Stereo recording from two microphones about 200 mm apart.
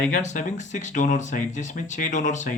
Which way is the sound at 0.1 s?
40° left (ahead or behind).